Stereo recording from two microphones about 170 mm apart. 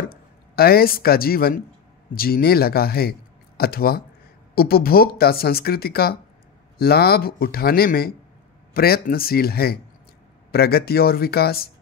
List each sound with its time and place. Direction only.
0.1 s speech: 65° left (ahead or behind)